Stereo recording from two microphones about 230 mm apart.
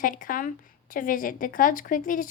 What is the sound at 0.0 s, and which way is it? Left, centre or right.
A woman's voice, left.